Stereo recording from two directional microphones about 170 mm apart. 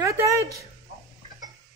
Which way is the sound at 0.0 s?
20° right (ahead or behind).